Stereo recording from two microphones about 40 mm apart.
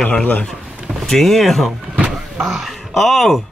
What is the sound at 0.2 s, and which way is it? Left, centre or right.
Speech, left.